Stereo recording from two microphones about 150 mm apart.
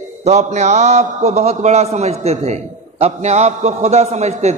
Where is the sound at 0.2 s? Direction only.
50° right (ahead or behind).